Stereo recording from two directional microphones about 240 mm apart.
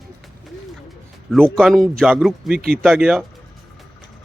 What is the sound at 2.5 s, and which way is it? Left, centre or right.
Speech, right.